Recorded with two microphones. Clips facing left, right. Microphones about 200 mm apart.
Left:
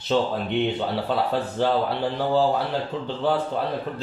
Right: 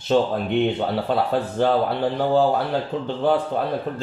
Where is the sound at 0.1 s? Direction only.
45° right (ahead or behind).